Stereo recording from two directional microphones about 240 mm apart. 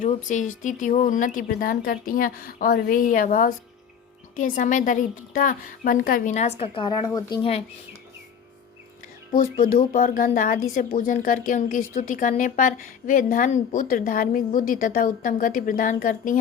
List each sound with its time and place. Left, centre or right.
0.0 s speech: left
9.3 s speech: left